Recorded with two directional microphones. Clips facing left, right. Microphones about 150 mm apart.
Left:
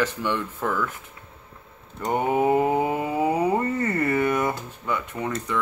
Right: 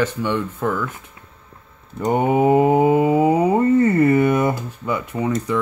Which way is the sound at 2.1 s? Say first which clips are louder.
Right 5 dB; 20° right (ahead or behind).